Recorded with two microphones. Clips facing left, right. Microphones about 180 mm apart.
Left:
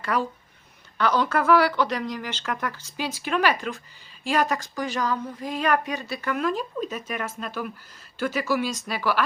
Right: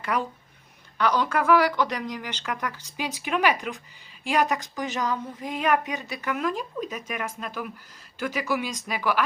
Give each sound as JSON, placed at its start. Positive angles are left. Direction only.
{"t": 0.0, "sound": "a woman's voice", "side_deg": -15}